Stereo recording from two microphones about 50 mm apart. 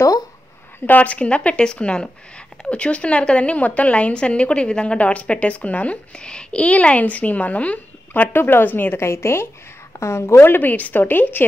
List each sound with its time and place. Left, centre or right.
0.8 s speech: left
8.1 s a woman's voice: left
9.0 s a woman's voice: left